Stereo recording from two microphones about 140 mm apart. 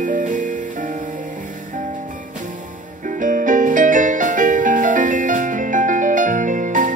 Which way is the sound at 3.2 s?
70° right (ahead or behind).